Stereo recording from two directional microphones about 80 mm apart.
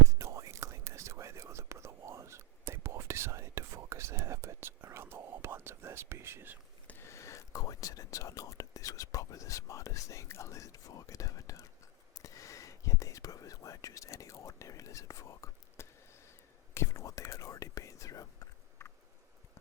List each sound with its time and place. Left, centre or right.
0.1 s whispering: right
7.0 s whispering: left